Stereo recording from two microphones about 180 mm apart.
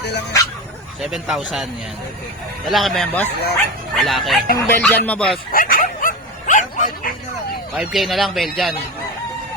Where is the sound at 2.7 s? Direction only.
Centre (ahead or behind).